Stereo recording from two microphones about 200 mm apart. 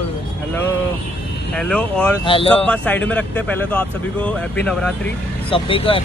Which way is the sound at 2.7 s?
5° left (ahead or behind).